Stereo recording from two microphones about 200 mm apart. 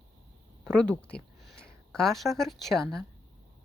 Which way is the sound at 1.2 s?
55° left (ahead or behind).